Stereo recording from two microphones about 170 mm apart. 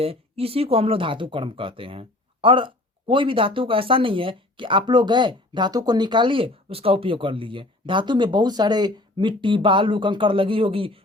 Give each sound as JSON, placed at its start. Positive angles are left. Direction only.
{"t": 0.0, "sound": "speech", "side_deg": -35}